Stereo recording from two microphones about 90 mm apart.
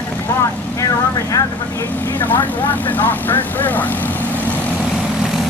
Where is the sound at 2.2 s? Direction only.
25° left (ahead or behind).